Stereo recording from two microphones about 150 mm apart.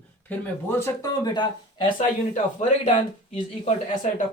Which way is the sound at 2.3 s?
55° left (ahead or behind).